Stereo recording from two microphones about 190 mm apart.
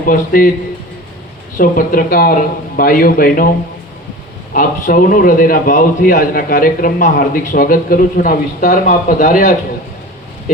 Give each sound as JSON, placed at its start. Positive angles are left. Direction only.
{"t": 0.1, "sound": "a man's voice", "side_deg": 50}
{"t": 1.5, "sound": "a man's voice", "side_deg": 50}
{"t": 4.5, "sound": "a man's voice", "side_deg": 45}